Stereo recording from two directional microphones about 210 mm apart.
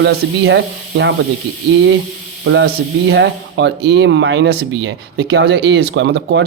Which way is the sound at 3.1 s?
55° right (ahead or behind).